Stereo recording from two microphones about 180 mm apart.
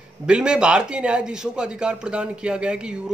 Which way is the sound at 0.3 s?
5° right (ahead or behind).